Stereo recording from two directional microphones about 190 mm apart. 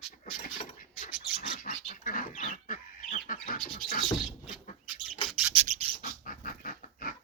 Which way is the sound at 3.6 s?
30° left (ahead or behind).